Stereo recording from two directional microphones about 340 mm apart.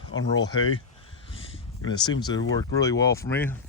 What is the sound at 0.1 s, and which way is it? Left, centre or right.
Speech, left.